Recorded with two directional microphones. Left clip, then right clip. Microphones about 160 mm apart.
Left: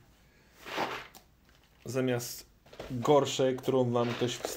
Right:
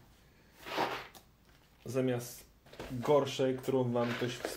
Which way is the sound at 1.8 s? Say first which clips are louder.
Left 2 dB; 40° left (ahead or behind).